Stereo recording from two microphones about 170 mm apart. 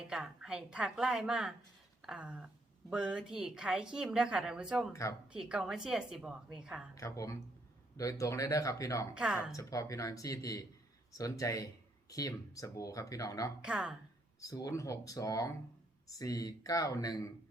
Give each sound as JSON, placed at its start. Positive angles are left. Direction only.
{"t": 0.0, "sound": "speech", "side_deg": -5}
{"t": 2.0, "sound": "a sound", "side_deg": -5}
{"t": 2.9, "sound": "speech", "side_deg": -5}
{"t": 6.9, "sound": "speech", "side_deg": 20}
{"t": 9.1, "sound": "speech", "side_deg": -5}
{"t": 9.5, "sound": "speech", "side_deg": 20}
{"t": 13.6, "sound": "speech", "side_deg": -5}
{"t": 14.4, "sound": "speech", "side_deg": 20}